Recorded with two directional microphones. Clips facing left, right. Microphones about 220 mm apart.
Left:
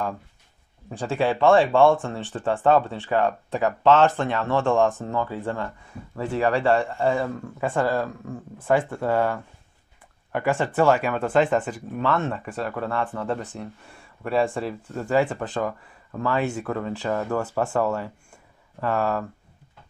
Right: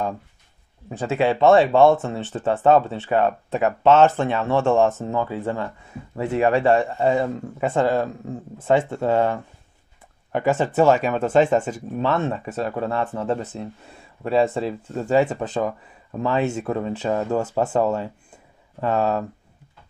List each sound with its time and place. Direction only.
0.8 s speech: 20° right (ahead or behind)
1.7 s speech: 40° right (ahead or behind)
2.6 s speech: 20° right (ahead or behind)